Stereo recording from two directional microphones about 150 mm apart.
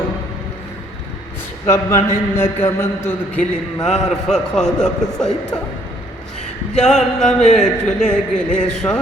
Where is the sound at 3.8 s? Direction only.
5° left (ahead or behind).